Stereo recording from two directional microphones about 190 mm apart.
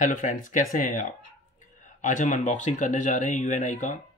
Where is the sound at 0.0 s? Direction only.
40° left (ahead or behind).